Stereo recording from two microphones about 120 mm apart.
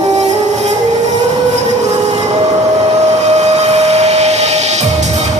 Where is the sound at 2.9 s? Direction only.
70° right (ahead or behind).